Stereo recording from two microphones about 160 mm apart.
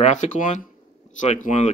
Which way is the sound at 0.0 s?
45° left (ahead or behind).